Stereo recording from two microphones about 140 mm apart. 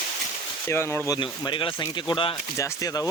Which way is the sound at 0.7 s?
15° left (ahead or behind).